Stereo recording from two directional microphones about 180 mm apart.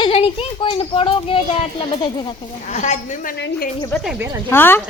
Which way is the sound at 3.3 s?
70° left (ahead or behind).